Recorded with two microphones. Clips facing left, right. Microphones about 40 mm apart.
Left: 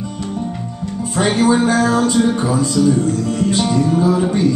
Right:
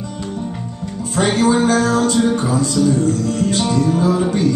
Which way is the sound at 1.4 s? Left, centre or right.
Centre.